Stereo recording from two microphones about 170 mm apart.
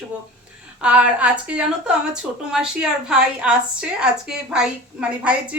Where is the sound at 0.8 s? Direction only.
5° right (ahead or behind).